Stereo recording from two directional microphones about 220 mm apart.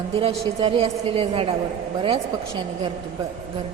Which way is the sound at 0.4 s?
25° right (ahead or behind).